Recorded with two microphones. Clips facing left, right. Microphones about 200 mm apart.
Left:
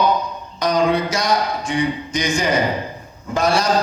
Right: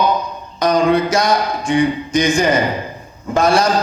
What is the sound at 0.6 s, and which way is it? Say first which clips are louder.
A man's voice: right 4 dB; 50° right (ahead or behind).